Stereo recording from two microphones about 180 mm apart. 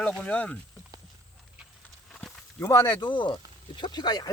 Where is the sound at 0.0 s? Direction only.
5° left (ahead or behind).